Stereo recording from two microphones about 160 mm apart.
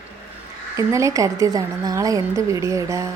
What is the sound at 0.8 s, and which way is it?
A woman's voice, 20° right (ahead or behind).